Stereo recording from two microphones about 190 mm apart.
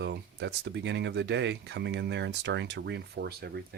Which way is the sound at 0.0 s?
65° right (ahead or behind).